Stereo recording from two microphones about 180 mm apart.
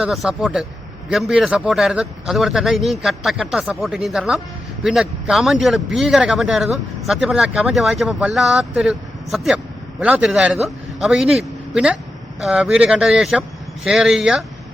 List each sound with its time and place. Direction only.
0.0 s a man's voice: centre (ahead or behind)